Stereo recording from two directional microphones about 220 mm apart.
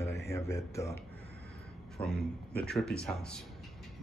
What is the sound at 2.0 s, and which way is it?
Speech, 5° left (ahead or behind).